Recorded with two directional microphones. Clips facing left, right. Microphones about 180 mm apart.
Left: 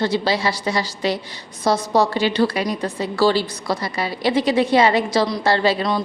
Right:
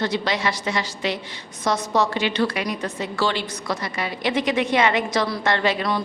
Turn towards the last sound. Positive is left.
turn(degrees=30)  # may be behind; listen again after turning